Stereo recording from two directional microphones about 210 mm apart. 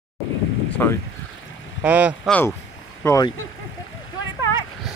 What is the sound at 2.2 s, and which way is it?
Speech, 5° left (ahead or behind).